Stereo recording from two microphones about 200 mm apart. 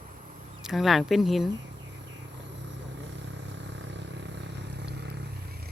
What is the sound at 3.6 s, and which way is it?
Vehicle, 60° right (ahead or behind).